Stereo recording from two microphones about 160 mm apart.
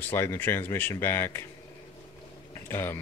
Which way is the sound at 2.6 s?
15° left (ahead or behind).